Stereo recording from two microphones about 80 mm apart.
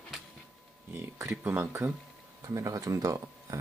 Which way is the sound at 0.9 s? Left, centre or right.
Right.